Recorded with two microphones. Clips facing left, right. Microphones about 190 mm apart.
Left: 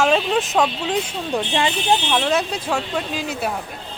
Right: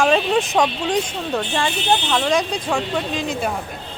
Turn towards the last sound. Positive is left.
turn(degrees=5)  # may be behind; listen again after turning